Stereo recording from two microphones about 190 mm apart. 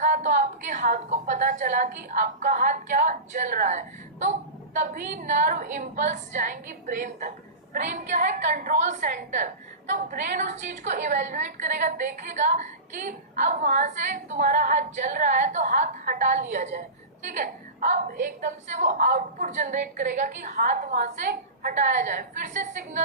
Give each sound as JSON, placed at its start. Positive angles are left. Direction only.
{"t": 0.0, "sound": "a sound", "side_deg": -40}
{"t": 2.0, "sound": "a woman's voice", "side_deg": -40}
{"t": 13.1, "sound": "a woman's voice", "side_deg": -40}